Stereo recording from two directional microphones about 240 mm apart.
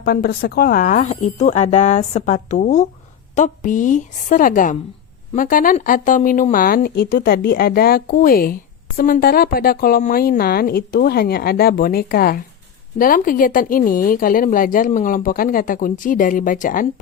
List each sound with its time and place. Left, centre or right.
0.0 s a woman's voice: left